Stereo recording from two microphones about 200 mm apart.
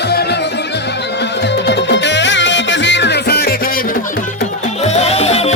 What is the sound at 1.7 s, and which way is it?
Music, 60° left (ahead or behind).